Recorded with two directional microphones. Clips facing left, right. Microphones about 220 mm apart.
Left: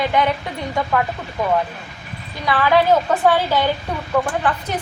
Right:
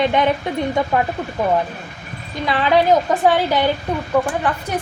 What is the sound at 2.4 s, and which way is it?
A woman's voice, 20° right (ahead or behind).